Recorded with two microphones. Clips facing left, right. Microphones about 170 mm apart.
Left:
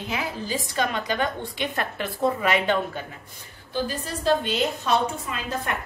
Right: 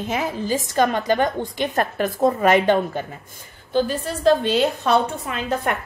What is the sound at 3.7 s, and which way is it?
A woman's voice, 60° right (ahead or behind).